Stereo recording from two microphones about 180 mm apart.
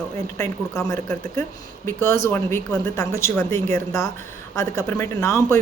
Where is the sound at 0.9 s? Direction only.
15° left (ahead or behind).